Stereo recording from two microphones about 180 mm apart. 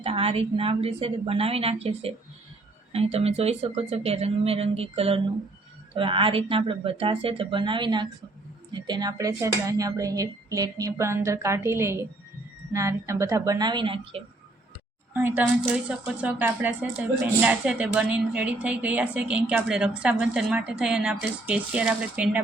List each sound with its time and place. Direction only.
0.0 s speech: 35° right (ahead or behind)
15.1 s speech: 10° right (ahead or behind)